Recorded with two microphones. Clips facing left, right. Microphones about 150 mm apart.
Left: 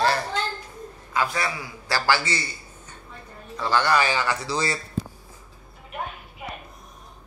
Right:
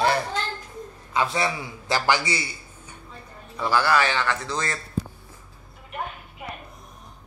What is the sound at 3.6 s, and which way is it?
Speech, 10° right (ahead or behind).